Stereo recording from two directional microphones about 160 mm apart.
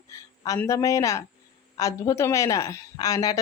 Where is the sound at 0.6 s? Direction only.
20° left (ahead or behind).